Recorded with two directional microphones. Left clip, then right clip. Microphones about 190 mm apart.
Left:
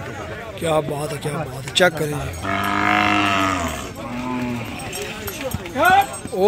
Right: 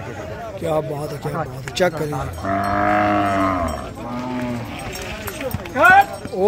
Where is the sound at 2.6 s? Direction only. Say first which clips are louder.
Even; 25° right (ahead or behind).